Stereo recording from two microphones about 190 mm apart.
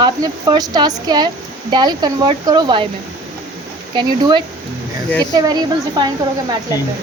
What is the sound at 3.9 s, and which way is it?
Speech, 25° right (ahead or behind).